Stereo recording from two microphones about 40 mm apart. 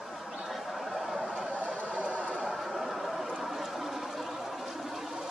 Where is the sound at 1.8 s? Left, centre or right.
Right.